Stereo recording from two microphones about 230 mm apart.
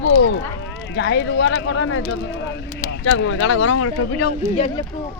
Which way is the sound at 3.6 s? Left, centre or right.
Left.